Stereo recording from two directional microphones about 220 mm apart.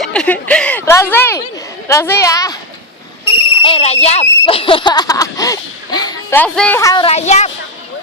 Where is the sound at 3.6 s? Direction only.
25° left (ahead or behind).